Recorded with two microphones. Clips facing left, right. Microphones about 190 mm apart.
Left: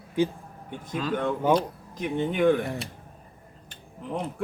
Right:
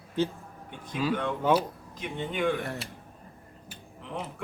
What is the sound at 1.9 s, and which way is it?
Speech, 50° left (ahead or behind).